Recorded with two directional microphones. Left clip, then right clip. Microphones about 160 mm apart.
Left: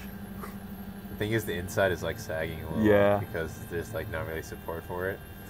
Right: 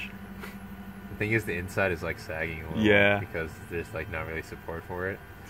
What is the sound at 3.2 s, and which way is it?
Speech, 30° right (ahead or behind).